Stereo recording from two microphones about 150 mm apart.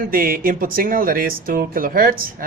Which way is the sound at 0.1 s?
75° right (ahead or behind).